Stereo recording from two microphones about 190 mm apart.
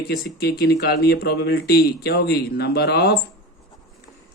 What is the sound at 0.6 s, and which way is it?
Speech, 55° left (ahead or behind).